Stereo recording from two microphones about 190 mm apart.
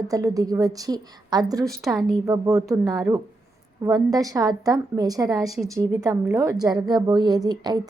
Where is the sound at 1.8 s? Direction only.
Centre (ahead or behind).